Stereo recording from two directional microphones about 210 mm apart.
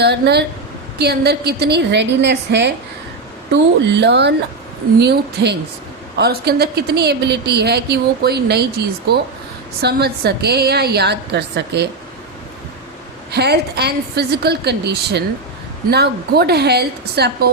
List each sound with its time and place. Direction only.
0.0 s a woman's voice: 50° right (ahead or behind)
13.3 s a woman's voice: 50° right (ahead or behind)